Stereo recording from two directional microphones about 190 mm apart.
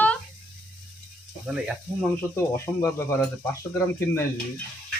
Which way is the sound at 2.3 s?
15° left (ahead or behind).